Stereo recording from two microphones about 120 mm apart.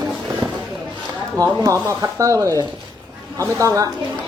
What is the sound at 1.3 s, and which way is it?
Speech, 30° right (ahead or behind).